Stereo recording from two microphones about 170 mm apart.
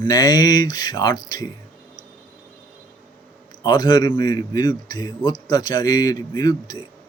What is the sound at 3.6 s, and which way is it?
Speech, 25° left (ahead or behind).